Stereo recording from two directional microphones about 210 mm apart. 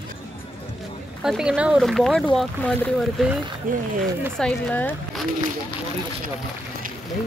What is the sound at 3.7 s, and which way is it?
Speech, 40° right (ahead or behind).